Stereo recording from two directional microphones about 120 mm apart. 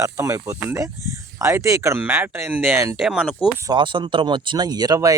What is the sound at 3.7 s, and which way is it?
Speech, 45° right (ahead or behind).